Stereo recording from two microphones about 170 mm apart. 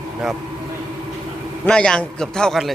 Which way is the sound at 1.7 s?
5° left (ahead or behind).